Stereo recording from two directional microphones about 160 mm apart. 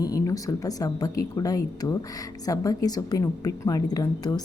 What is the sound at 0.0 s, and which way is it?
A woman's voice, 20° left (ahead or behind).